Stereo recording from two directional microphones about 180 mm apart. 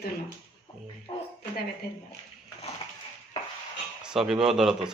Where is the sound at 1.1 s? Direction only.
25° left (ahead or behind).